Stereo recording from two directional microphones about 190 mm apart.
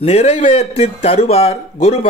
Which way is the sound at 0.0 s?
35° left (ahead or behind).